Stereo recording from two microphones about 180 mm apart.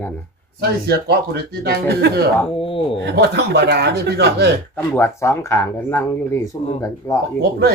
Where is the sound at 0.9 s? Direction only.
65° right (ahead or behind).